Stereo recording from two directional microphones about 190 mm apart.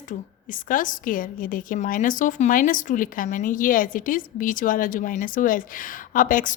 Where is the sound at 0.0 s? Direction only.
45° left (ahead or behind).